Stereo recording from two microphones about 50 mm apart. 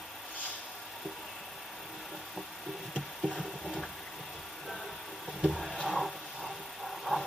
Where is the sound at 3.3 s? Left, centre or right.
Centre.